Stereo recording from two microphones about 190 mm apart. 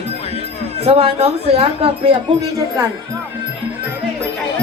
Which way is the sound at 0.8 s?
30° right (ahead or behind).